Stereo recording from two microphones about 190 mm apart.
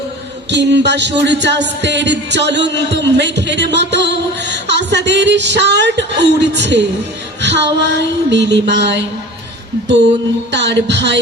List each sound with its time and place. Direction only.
0.5 s music: 65° right (ahead or behind)
10.5 s speech: 70° right (ahead or behind)